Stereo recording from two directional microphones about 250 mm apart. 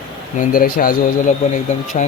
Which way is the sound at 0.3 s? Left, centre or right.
Left.